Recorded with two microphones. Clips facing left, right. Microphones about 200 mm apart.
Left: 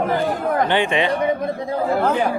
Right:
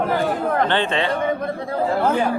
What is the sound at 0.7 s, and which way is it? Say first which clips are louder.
Speech: left 2 dB; 15° left (ahead or behind).